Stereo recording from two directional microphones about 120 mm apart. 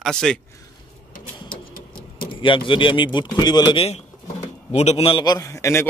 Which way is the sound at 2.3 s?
45° left (ahead or behind).